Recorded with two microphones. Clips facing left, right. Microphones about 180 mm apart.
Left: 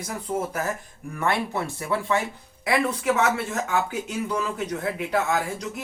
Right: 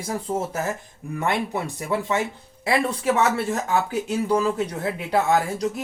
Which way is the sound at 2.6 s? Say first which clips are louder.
Right 1 dB; 30° right (ahead or behind).